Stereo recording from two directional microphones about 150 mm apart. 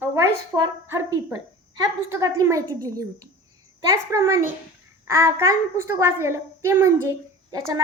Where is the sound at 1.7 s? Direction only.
25° right (ahead or behind).